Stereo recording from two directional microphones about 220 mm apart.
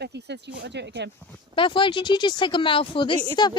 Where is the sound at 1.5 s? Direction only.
25° left (ahead or behind).